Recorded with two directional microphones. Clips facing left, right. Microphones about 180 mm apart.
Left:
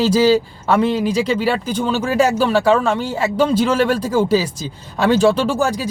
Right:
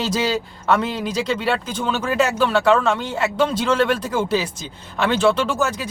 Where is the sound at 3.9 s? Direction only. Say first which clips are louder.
Left 5 dB; 35° left (ahead or behind).